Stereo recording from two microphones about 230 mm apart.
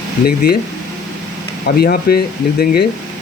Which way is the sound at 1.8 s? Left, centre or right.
Left.